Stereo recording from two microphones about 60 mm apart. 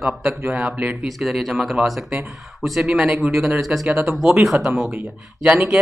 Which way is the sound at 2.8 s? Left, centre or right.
Centre.